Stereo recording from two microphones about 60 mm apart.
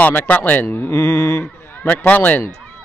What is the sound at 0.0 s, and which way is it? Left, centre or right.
Speech, left.